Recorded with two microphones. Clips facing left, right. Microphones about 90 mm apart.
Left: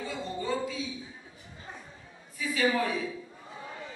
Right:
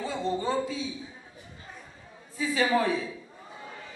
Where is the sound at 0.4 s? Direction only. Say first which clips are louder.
Right 3 dB; 30° right (ahead or behind).